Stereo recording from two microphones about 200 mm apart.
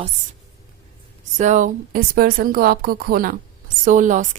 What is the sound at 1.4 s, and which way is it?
A woman's voice, 40° right (ahead or behind).